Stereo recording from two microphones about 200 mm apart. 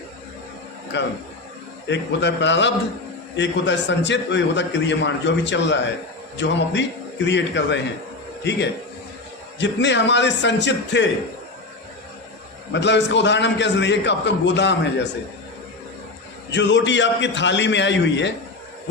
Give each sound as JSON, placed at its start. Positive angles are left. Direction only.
{"t": 0.9, "sound": "a man's voice", "side_deg": 60}
{"t": 9.6, "sound": "a man's voice", "side_deg": 60}
{"t": 12.7, "sound": "a man's voice", "side_deg": 60}
{"t": 16.5, "sound": "a man's voice", "side_deg": 60}